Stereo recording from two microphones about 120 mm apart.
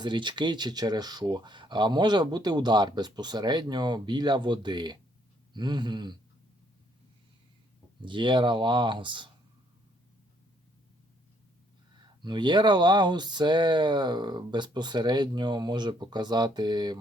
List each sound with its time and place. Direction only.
0.0 s speech: 40° right (ahead or behind)
8.0 s speech: 40° right (ahead or behind)
12.2 s speech: 40° right (ahead or behind)